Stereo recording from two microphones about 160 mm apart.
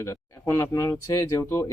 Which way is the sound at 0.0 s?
20° left (ahead or behind).